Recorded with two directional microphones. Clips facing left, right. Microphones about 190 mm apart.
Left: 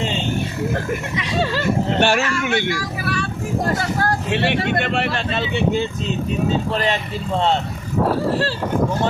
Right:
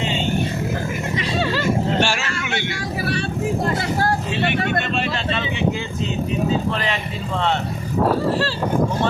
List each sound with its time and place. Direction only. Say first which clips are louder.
2.0 s speech: left 4 dB; 60° left (ahead or behind)